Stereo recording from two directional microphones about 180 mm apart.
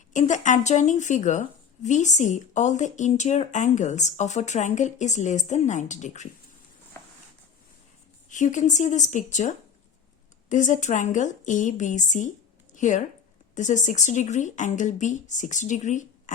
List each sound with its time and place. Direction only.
0.1 s speech: 45° left (ahead or behind)
8.3 s speech: 45° left (ahead or behind)